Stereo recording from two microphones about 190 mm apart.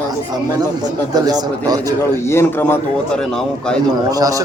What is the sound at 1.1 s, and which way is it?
Speech, 20° right (ahead or behind).